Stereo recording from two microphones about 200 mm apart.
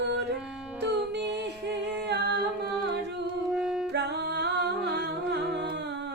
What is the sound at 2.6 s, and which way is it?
Music, 60° right (ahead or behind).